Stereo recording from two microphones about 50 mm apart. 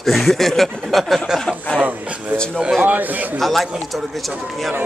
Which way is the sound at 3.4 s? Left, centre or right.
Centre.